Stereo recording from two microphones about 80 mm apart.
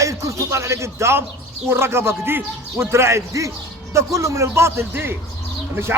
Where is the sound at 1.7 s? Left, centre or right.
Right.